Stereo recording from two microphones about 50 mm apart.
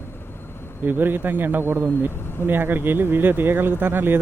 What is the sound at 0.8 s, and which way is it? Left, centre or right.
A man's voice, right.